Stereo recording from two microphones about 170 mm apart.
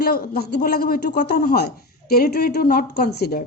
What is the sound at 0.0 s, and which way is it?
Speech, 60° left (ahead or behind).